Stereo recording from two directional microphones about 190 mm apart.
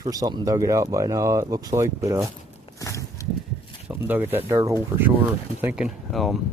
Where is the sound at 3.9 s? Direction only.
10° right (ahead or behind).